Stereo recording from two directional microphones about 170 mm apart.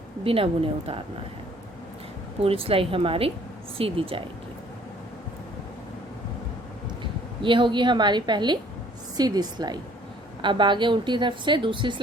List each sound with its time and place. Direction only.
0.3 s speech: 35° right (ahead or behind)
2.4 s speech: 35° right (ahead or behind)
7.0 s a woman's voice: 30° right (ahead or behind)